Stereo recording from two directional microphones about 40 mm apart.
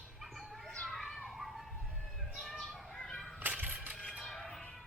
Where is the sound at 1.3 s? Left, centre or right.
Centre.